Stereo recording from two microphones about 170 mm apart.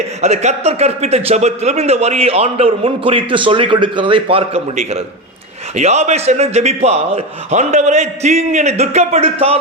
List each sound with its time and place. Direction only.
0.2 s a man's voice: 40° right (ahead or behind)